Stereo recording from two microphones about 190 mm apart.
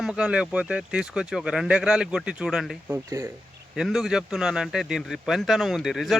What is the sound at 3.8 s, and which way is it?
Speech, centre (ahead or behind).